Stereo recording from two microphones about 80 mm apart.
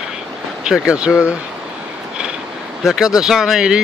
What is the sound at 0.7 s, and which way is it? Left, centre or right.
Speech, centre.